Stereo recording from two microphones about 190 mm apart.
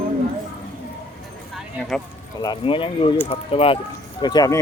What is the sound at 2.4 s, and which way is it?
Speech, 25° left (ahead or behind).